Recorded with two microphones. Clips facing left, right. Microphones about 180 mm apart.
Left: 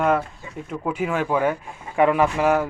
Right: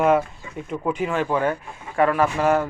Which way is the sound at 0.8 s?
10° left (ahead or behind).